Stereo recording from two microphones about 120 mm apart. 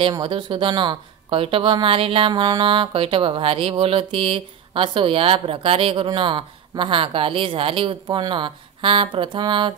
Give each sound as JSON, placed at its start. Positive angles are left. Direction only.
{"t": 0.1, "sound": "speech", "side_deg": -40}